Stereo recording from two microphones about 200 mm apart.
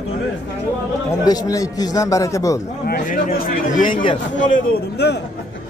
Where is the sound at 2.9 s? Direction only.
45° left (ahead or behind).